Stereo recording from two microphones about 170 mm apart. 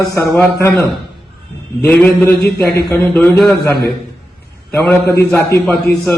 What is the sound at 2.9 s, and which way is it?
Speech, 10° left (ahead or behind).